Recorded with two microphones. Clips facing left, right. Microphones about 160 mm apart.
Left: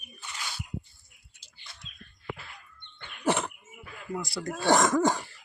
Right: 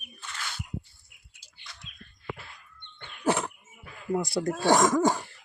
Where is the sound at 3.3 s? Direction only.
5° right (ahead or behind).